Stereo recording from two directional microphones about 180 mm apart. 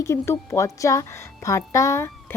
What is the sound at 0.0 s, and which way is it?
Speech, 15° left (ahead or behind).